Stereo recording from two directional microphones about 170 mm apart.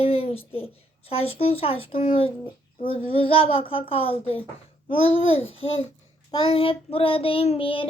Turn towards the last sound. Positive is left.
turn(degrees=30)  # may be behind; listen again after turning